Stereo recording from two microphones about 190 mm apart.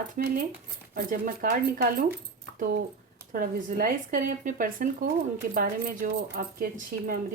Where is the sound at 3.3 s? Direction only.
50° right (ahead or behind).